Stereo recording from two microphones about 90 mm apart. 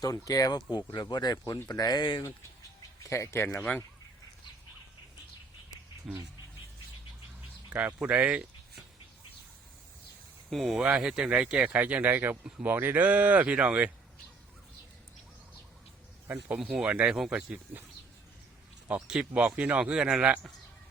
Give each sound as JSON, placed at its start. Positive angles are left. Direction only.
{"t": 0.0, "sound": "speech", "side_deg": 40}
{"t": 3.0, "sound": "speech", "side_deg": 35}
{"t": 6.1, "sound": "speech", "side_deg": -5}
{"t": 7.7, "sound": "speech", "side_deg": -20}
{"t": 10.5, "sound": "speech", "side_deg": -5}
{"t": 16.6, "sound": "speech", "side_deg": -10}
{"t": 18.9, "sound": "speech", "side_deg": -10}